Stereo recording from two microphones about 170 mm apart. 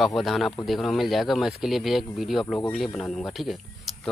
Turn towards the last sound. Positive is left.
turn(degrees=0)  # may be behind; listen again after turning